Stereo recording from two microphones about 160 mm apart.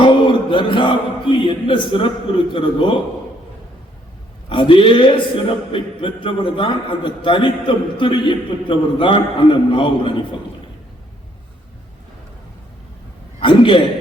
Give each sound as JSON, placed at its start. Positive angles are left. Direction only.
{"t": 0.0, "sound": "a sound", "side_deg": 30}
{"t": 4.4, "sound": "a man's voice", "side_deg": 30}
{"t": 13.4, "sound": "a man's voice", "side_deg": 30}